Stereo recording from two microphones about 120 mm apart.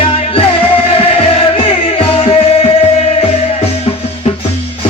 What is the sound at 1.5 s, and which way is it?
Music, 50° left (ahead or behind).